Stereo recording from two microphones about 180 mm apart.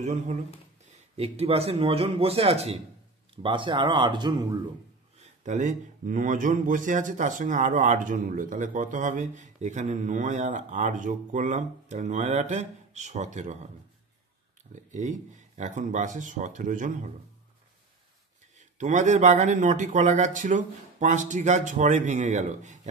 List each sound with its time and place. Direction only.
0.0 s speech: 40° right (ahead or behind); by 4.6 s 25° right (ahead or behind)
5.2 s speech: 40° right (ahead or behind)
14.7 s speech: 40° right (ahead or behind)
18.8 s speech: 40° right (ahead or behind)